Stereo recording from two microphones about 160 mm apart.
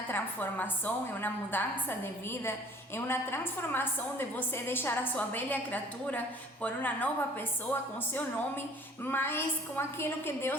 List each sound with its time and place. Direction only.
0.1 s a woman's voice: 10° left (ahead or behind)